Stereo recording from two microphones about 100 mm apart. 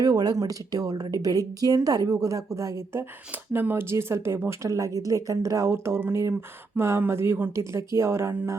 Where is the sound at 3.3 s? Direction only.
20° right (ahead or behind).